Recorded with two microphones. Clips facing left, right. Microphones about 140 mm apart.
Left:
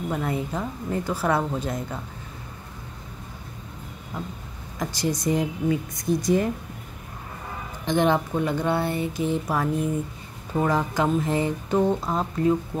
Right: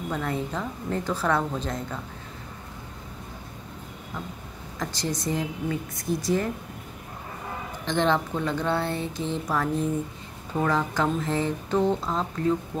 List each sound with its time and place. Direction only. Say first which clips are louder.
0.1 s speech: left 1 dB; 10° left (ahead or behind)
4.7 s speech: left 3 dB; 10° left (ahead or behind)
7.8 s speech: left 3 dB; 15° left (ahead or behind)